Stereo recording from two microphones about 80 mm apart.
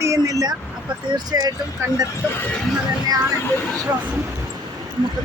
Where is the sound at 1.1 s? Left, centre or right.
Right.